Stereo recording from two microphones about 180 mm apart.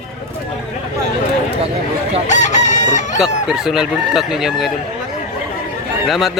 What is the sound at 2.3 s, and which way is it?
Chicken, 40° left (ahead or behind).